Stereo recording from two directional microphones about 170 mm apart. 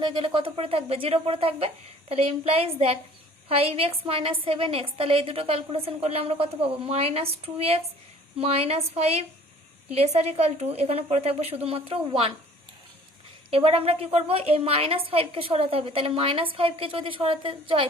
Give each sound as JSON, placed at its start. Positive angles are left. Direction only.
{"t": 0.0, "sound": "a woman's voice", "side_deg": -25}
{"t": 13.5, "sound": "a woman's voice", "side_deg": -35}